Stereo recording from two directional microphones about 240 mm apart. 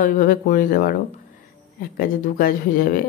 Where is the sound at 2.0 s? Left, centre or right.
Left.